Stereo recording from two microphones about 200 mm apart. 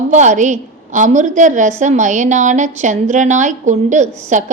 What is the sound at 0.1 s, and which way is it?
A woman's voice, 40° right (ahead or behind).